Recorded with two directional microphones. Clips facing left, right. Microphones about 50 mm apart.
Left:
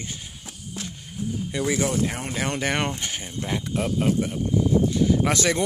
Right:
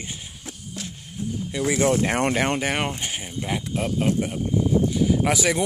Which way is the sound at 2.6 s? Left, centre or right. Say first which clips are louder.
Even; centre.